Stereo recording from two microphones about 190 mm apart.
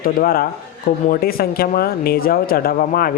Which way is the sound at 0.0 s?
50° left (ahead or behind).